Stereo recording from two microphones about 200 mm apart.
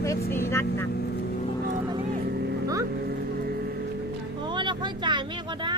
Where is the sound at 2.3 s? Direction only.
55° right (ahead or behind).